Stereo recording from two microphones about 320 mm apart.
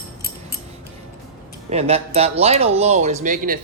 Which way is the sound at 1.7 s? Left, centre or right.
Centre.